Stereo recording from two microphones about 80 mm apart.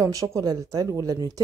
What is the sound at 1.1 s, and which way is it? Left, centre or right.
Speech, right.